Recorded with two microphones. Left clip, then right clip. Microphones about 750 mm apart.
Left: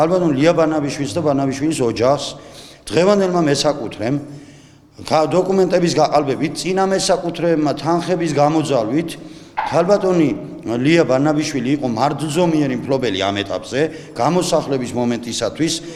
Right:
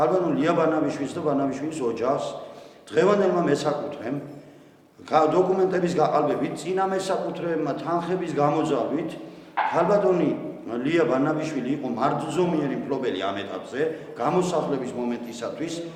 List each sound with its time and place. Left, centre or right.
0.0 s a man's voice: left